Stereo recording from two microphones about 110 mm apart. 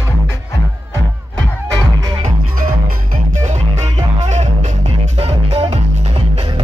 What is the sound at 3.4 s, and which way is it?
Music, 90° right.